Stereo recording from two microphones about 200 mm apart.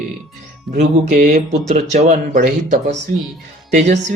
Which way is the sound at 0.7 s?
40° right (ahead or behind).